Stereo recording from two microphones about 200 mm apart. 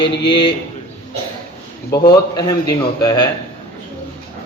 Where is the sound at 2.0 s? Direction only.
20° left (ahead or behind).